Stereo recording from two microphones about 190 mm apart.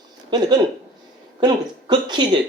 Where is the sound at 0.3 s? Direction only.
20° right (ahead or behind).